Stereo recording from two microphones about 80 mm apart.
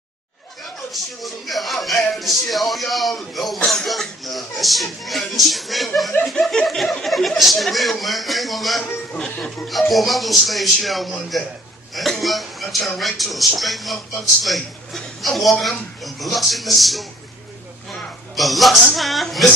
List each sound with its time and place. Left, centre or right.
1.2 s speech: centre
18.3 s speech: centre